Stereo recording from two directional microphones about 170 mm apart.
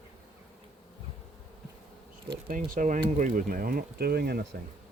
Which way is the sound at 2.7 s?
50° right (ahead or behind).